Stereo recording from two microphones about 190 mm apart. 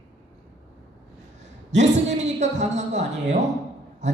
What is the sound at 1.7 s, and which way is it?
A woman's voice, 40° right (ahead or behind).